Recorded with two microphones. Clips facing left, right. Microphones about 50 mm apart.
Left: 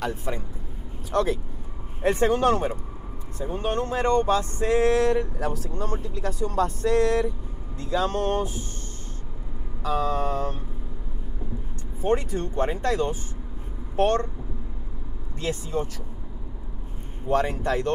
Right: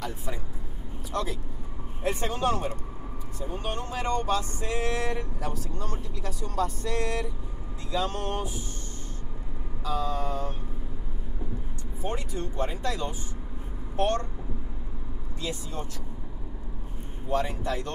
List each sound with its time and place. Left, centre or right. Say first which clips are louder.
0.0 s speech: left 6 dB; left
2.5 s speech: left 5 dB; left
9.8 s speech: left 5 dB; left
12.0 s speech: left 8 dB; left
15.4 s speech: left 7 dB; left
17.3 s speech: left 5 dB; left